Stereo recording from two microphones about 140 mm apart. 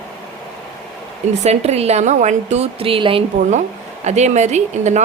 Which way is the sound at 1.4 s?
50° right (ahead or behind).